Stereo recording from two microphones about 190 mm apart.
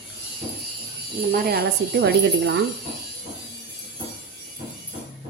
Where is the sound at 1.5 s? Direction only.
55° right (ahead or behind).